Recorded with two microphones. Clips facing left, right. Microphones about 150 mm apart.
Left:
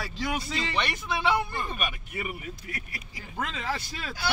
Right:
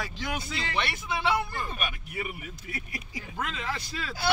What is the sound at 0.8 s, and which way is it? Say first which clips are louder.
Speech: even; centre (ahead or behind).